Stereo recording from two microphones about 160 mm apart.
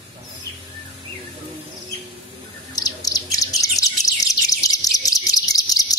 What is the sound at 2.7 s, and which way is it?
Bird, 25° left (ahead or behind).